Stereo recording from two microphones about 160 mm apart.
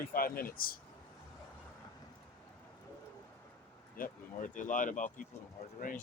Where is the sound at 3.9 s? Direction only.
60° left (ahead or behind).